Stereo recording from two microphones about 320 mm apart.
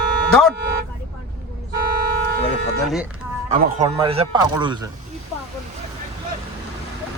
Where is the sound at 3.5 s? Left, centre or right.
Right.